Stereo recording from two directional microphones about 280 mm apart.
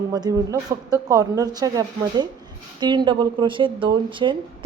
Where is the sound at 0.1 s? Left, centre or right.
Centre.